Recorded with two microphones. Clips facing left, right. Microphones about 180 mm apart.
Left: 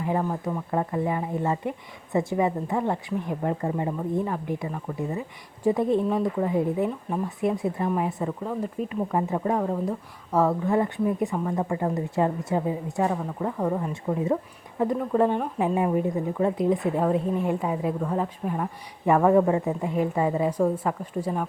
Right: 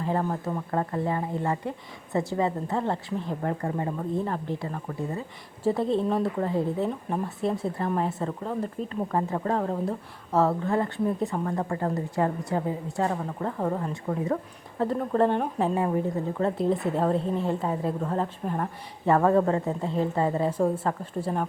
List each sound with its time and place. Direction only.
0.0 s a woman's voice: 10° left (ahead or behind)
14.9 s a woman's voice: 10° left (ahead or behind)
20.5 s a woman's voice: 10° right (ahead or behind)
20.8 s a woman's voice: 10° left (ahead or behind)